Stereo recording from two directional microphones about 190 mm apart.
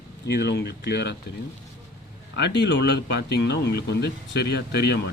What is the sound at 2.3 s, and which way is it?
Speech, 65° left (ahead or behind).